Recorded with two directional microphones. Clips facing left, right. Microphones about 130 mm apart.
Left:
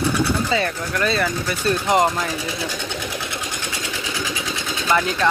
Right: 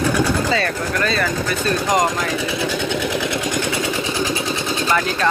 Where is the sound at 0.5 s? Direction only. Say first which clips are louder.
Right 2 dB; 15° left (ahead or behind).